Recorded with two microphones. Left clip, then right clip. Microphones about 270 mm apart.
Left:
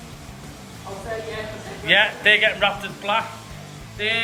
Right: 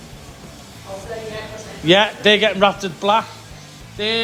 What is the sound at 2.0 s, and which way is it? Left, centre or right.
Speech, right.